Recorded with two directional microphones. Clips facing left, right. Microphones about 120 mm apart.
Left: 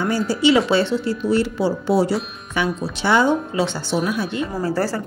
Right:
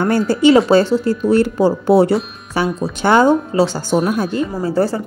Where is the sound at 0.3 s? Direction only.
45° right (ahead or behind).